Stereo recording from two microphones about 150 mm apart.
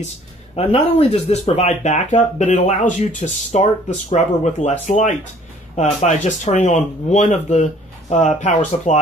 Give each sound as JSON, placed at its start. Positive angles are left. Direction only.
{"t": 0.6, "sound": "speech", "side_deg": 45}
{"t": 1.7, "sound": "speech", "side_deg": 50}